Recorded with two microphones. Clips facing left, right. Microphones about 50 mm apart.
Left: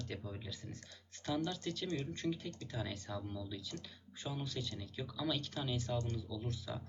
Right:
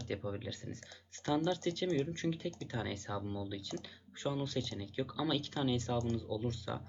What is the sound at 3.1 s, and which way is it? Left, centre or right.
Speech, centre.